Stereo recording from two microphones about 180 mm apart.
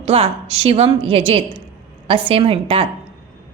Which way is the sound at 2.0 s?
30° right (ahead or behind).